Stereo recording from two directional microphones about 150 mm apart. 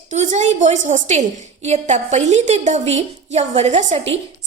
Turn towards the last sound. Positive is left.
turn(degrees=-45)  # may be behind; listen again after turning